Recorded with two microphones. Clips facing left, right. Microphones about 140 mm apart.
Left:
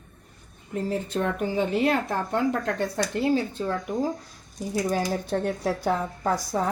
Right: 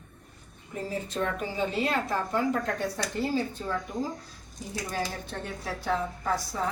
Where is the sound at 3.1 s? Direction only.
70° left (ahead or behind).